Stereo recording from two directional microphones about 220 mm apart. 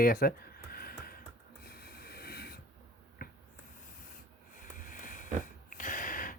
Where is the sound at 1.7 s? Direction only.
45° left (ahead or behind).